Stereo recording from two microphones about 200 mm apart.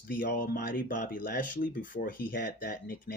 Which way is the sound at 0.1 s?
45° left (ahead or behind).